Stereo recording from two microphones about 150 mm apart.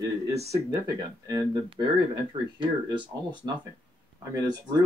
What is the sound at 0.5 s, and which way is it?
Speech, 30° right (ahead or behind).